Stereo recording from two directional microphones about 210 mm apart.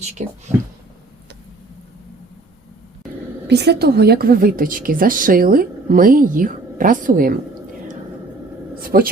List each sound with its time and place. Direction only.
0.2 s speech: 35° right (ahead or behind)
3.4 s a woman's voice: 50° right (ahead or behind)
8.8 s a sound: 45° right (ahead or behind)